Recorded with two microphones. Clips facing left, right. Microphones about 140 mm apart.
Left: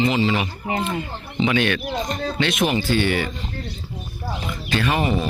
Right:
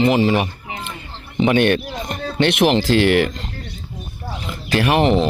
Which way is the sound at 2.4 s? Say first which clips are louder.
Right 7 dB; 65° right (ahead or behind).